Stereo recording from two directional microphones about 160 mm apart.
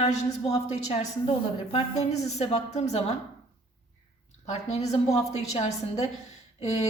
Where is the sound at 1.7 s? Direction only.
40° left (ahead or behind).